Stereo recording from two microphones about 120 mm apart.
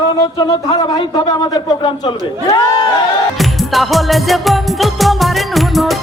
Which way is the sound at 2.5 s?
35° left (ahead or behind).